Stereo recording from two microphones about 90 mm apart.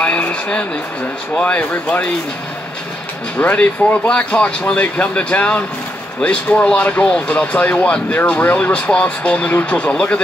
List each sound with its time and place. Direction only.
0.0 s a sound: 15° left (ahead or behind)
1.3 s speech: 15° left (ahead or behind)
3.3 s speech: 15° left (ahead or behind)